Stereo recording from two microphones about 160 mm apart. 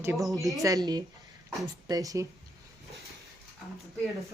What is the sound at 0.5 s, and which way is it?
Speech, 20° right (ahead or behind).